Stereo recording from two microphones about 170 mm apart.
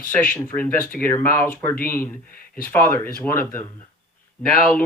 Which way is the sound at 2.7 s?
15° left (ahead or behind).